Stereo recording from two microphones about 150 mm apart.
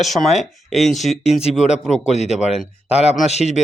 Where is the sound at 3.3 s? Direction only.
50° left (ahead or behind).